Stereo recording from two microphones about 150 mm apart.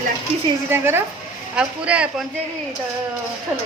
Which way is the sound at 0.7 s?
15° right (ahead or behind).